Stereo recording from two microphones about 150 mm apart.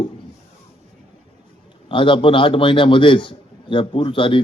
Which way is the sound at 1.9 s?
35° left (ahead or behind).